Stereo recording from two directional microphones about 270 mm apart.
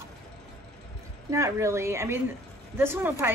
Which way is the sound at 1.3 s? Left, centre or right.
Centre.